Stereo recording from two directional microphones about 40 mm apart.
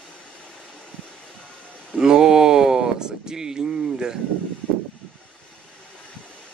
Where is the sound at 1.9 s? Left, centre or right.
Centre.